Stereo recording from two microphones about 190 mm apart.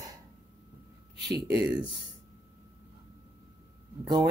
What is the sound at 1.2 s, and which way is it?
Speech, 65° right (ahead or behind).